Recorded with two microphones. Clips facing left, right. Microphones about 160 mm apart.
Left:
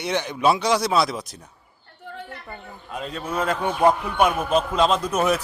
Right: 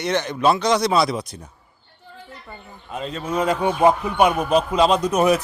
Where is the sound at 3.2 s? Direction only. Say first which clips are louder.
Right 4 dB; 10° right (ahead or behind).